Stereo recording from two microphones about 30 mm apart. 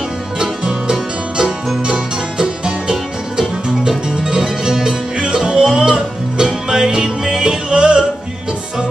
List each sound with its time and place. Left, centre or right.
0.4 s music: right
2.4 s music: right